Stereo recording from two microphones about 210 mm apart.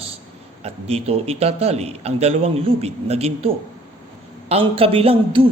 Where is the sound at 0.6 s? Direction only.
30° right (ahead or behind).